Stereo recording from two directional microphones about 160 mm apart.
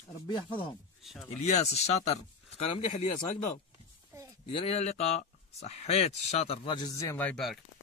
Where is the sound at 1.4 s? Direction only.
45° left (ahead or behind).